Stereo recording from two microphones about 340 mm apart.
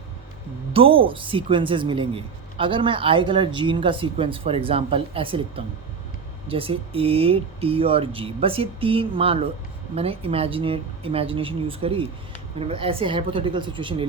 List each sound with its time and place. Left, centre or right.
0.7 s speech: centre